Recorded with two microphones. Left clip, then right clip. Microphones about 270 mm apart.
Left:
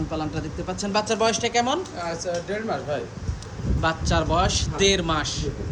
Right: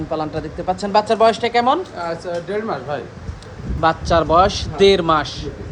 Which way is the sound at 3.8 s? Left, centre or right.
Centre.